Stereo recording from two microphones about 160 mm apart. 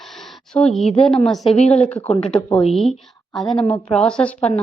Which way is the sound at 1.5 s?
40° left (ahead or behind).